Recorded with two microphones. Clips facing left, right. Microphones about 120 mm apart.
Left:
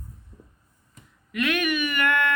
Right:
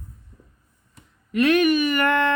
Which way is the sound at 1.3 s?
30° right (ahead or behind).